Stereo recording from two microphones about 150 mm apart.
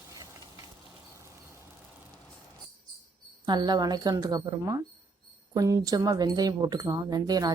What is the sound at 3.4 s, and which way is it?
Speech, 30° right (ahead or behind).